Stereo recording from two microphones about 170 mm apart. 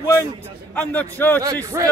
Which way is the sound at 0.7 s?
10° left (ahead or behind).